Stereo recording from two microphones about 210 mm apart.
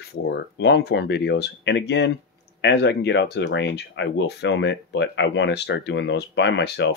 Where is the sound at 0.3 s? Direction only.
55° left (ahead or behind).